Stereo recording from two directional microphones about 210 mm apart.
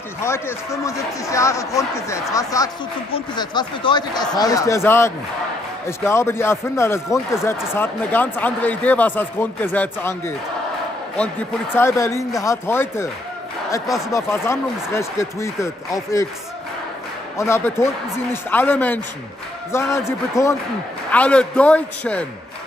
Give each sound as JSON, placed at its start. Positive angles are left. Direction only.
{"t": 0.2, "sound": "speech", "side_deg": 15}
{"t": 11.7, "sound": "speech", "side_deg": 10}
{"t": 13.8, "sound": "a man's voice", "side_deg": 0}
{"t": 14.1, "sound": "speech", "side_deg": 10}
{"t": 17.4, "sound": "a man's voice", "side_deg": 15}